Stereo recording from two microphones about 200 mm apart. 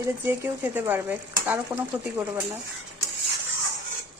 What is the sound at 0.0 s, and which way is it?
Stir, 15° right (ahead or behind).